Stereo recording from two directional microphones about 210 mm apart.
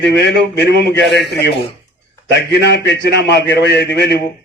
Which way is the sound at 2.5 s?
55° left (ahead or behind).